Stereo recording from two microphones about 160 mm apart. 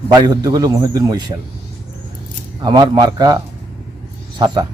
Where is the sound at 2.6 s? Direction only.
25° right (ahead or behind).